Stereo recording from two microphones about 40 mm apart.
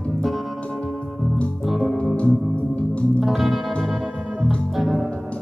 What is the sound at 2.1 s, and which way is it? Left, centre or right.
Music, left.